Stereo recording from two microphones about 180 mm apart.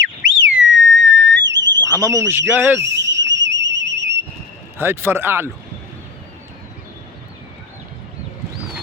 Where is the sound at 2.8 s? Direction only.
80° right.